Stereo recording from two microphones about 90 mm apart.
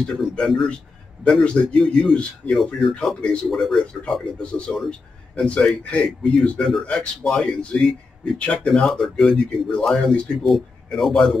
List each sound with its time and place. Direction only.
0.0 s speech: 5° left (ahead or behind)